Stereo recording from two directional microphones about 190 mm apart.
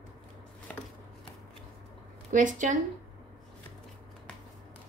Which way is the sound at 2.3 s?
40° right (ahead or behind).